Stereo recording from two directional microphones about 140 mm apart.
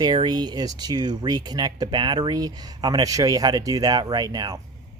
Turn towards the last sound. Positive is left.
turn(degrees=-30)  # may be behind; listen again after turning